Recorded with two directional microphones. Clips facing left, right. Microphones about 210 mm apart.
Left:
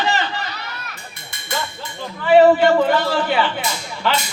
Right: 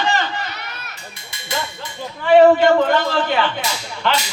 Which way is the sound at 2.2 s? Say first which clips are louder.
Right 1 dB; 5° left (ahead or behind).